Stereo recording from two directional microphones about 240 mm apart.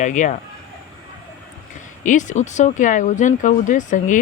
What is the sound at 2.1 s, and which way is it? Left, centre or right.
Speech, left.